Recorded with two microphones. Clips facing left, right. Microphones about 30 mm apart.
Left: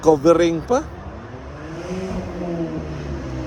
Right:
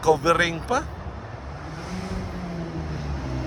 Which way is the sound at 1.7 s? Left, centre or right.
Right.